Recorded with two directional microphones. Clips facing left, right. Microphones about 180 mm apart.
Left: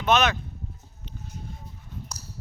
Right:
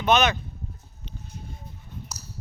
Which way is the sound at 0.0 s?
Centre (ahead or behind).